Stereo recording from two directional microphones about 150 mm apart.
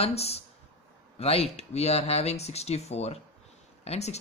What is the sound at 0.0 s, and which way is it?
Speech, 45° left (ahead or behind).